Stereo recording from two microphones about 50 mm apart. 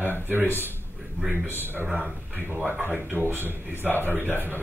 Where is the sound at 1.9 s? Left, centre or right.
Right.